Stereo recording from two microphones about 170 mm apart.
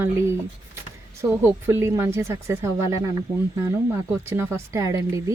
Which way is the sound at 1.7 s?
15° right (ahead or behind).